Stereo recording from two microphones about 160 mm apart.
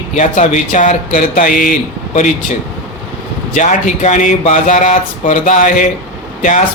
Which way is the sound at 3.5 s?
50° left (ahead or behind).